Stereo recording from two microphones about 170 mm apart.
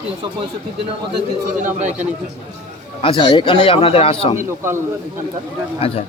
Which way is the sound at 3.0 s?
30° left (ahead or behind).